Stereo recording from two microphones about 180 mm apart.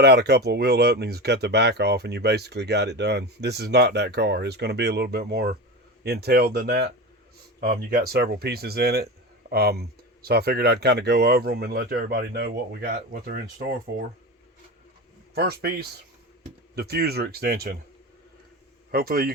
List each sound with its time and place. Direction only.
0.0 s speech: 65° right (ahead or behind)
15.4 s speech: 60° right (ahead or behind)
18.9 s a man's voice: 55° right (ahead or behind)